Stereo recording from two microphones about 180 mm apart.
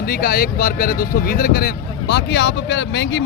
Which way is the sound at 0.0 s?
60° left (ahead or behind).